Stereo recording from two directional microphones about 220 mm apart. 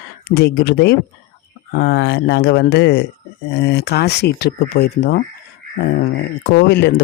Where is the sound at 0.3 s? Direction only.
50° left (ahead or behind).